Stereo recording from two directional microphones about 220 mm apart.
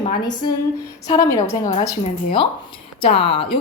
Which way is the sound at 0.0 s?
20° left (ahead or behind).